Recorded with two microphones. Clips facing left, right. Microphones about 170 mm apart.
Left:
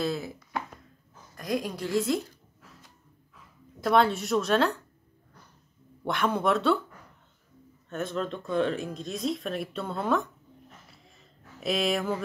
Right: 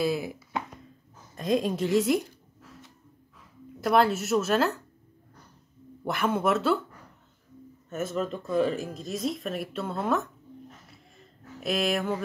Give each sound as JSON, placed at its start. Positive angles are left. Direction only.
{"t": 0.0, "sound": "a woman's voice", "side_deg": -10}
{"t": 3.8, "sound": "speech", "side_deg": -5}
{"t": 6.0, "sound": "speech", "side_deg": -5}
{"t": 7.9, "sound": "speech", "side_deg": -5}
{"t": 10.9, "sound": "a sound", "side_deg": 0}